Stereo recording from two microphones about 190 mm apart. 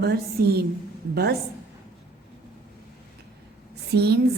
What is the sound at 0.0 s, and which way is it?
A woman's voice, 55° right (ahead or behind).